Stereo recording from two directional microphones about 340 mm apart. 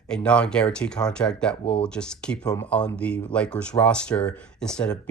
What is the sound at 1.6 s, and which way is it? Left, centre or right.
Speech, centre.